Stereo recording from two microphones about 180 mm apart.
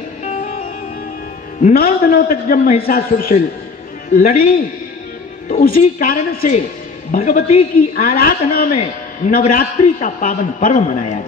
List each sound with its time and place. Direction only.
1.6 s a man's voice: 50° left (ahead or behind)
5.5 s a man's voice: 50° left (ahead or behind)
8.7 s a man's voice: 35° left (ahead or behind)
9.5 s a man's voice: 50° left (ahead or behind)